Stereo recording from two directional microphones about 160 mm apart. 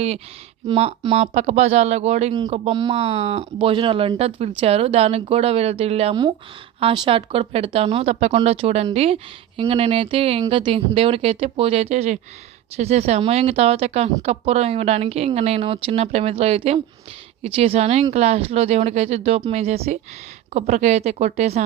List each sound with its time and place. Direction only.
0.7 s speech: 40° right (ahead or behind)